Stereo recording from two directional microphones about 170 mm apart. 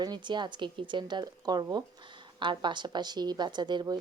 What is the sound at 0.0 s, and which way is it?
A woman's voice, 25° right (ahead or behind).